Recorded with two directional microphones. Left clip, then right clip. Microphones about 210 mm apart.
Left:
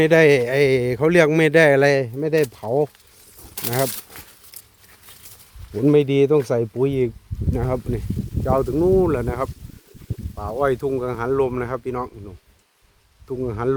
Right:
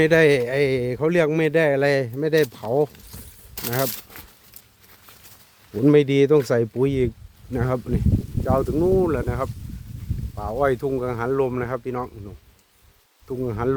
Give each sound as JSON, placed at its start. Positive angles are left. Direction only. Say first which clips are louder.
{"t": 0.0, "sound": "a man's voice", "louder": "left 2 dB", "side_deg": 15}
{"t": 1.9, "sound": "speech", "louder": "left 1 dB", "side_deg": 10}
{"t": 5.7, "sound": "speech", "louder": "even", "side_deg": 0}
{"t": 8.4, "sound": "a man's voice", "louder": "left 2 dB", "side_deg": 20}
{"t": 10.3, "sound": "speech", "louder": "left 1 dB", "side_deg": 5}